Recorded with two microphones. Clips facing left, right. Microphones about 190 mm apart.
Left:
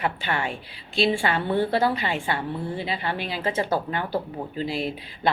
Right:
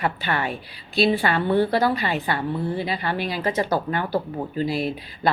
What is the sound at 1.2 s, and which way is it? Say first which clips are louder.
A woman's voice: right 3 dB; 20° left (ahead or behind).